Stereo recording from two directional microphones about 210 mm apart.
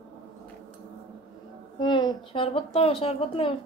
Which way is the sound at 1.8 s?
20° left (ahead or behind).